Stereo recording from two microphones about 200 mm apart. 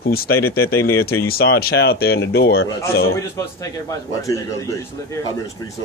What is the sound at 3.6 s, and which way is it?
Speech, 15° left (ahead or behind).